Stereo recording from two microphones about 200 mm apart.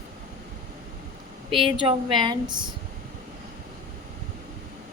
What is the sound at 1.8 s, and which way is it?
Speech, 25° right (ahead or behind).